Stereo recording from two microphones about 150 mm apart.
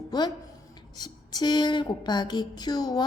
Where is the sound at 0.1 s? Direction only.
25° left (ahead or behind).